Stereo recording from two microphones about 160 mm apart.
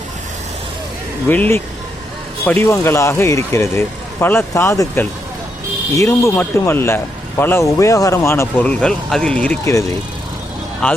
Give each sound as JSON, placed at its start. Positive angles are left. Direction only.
{"t": 1.3, "sound": "a man's voice", "side_deg": 10}
{"t": 10.8, "sound": "speech", "side_deg": 5}